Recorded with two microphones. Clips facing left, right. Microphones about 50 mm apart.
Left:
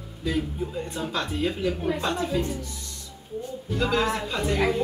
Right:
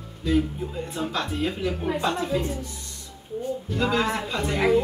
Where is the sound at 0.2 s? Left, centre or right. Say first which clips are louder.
Right 4 dB; centre.